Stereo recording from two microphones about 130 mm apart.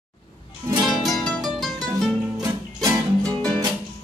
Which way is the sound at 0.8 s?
Centre (ahead or behind).